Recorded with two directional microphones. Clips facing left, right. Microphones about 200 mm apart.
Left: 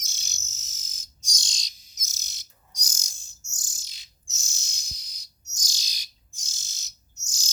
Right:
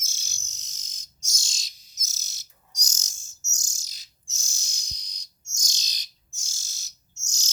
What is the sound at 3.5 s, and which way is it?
Bird, 45° right (ahead or behind).